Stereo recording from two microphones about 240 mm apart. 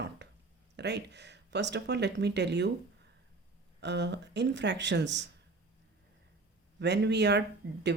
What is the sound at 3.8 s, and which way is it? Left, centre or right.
Speech, right.